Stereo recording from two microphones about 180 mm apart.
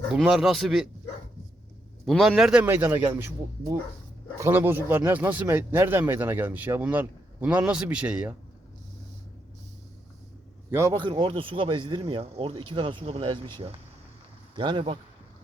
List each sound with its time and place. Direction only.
0.1 s speech: 5° right (ahead or behind)
2.0 s speech: centre (ahead or behind)
10.7 s a man's voice: 15° right (ahead or behind)
10.9 s speech: 25° right (ahead or behind)
14.5 s speech: 25° right (ahead or behind)